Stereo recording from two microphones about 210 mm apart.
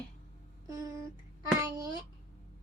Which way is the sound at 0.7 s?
15° right (ahead or behind).